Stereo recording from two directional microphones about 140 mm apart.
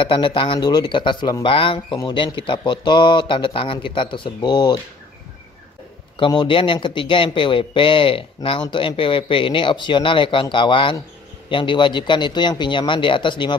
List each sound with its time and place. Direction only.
0.0 s speech: 40° left (ahead or behind)
6.1 s speech: 35° left (ahead or behind)